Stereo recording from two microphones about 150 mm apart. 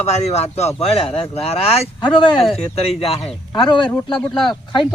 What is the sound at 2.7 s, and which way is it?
Speech, 40° left (ahead or behind).